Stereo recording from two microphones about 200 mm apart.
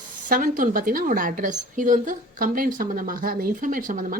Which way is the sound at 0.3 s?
40° right (ahead or behind).